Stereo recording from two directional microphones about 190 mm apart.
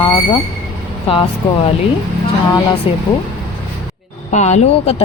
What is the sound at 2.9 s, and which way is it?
Speech, 30° left (ahead or behind).